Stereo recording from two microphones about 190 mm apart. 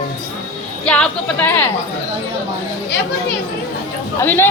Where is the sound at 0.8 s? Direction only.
5° left (ahead or behind).